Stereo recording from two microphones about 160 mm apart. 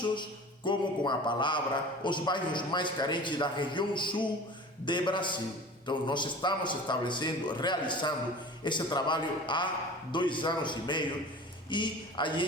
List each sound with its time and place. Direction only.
0.0 s a man's voice: 30° left (ahead or behind)